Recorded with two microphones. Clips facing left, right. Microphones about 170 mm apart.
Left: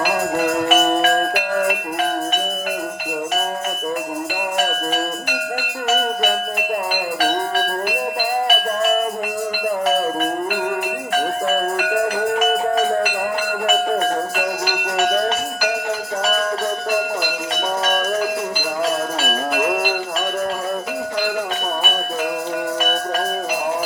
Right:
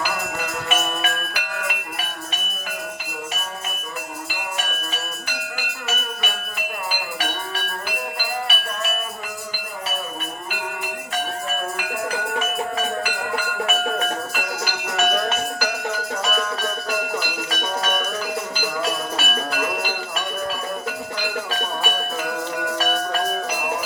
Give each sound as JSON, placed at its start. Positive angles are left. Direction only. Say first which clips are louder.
{"t": 0.0, "sound": "music", "louder": "left 8 dB", "side_deg": 50}
{"t": 7.2, "sound": "music", "louder": "left 10 dB", "side_deg": 50}